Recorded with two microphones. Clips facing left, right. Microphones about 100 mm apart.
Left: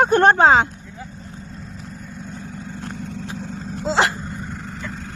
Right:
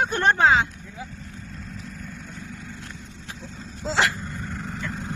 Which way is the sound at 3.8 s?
25° left (ahead or behind).